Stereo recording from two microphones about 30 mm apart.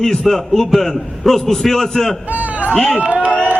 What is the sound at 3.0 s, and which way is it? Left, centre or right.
Speech, right.